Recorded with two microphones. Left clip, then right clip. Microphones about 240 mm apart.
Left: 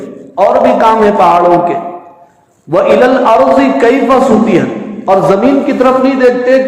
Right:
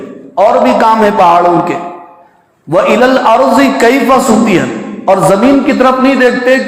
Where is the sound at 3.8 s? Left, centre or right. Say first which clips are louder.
Even; right.